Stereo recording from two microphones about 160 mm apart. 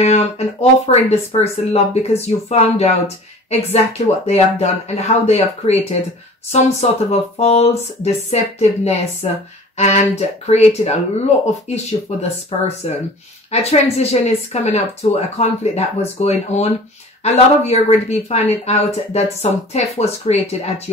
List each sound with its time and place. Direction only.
0.0 s speech: 40° left (ahead or behind)
4.3 s speech: 45° left (ahead or behind)